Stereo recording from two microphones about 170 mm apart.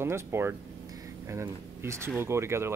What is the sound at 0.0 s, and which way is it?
Speech, 15° right (ahead or behind).